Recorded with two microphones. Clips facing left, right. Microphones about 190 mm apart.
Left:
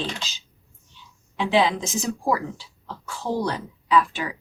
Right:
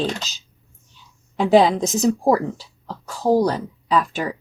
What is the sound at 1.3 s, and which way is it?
A woman's voice, 45° right (ahead or behind).